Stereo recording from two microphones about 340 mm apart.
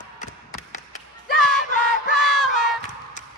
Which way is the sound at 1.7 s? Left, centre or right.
Left.